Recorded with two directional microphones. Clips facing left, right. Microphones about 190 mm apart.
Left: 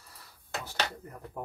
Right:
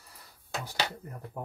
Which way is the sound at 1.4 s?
5° right (ahead or behind).